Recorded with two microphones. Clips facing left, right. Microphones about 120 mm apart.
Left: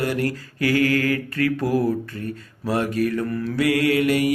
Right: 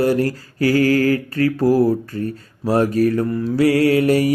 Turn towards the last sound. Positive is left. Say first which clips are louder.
# right 4 dB
turn(degrees=-35)  # may be behind; listen again after turning